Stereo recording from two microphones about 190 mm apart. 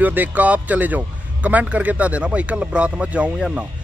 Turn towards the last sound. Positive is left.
turn(degrees=-5)  # may be behind; listen again after turning